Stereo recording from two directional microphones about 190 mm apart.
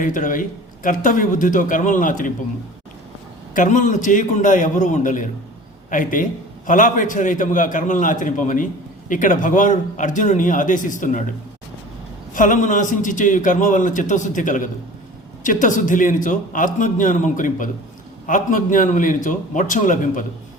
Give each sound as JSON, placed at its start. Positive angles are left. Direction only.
{"t": 0.0, "sound": "a man's voice", "side_deg": 45}
{"t": 3.5, "sound": "a man's voice", "side_deg": 40}
{"t": 12.3, "sound": "a man's voice", "side_deg": 45}